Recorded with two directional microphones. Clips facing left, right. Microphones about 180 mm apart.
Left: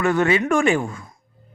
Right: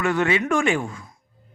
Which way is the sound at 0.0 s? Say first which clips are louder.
Left 3 dB; 40° left (ahead or behind).